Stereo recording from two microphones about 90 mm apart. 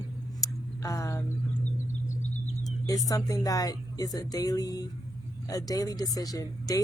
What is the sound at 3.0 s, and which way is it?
Speech, 40° left (ahead or behind).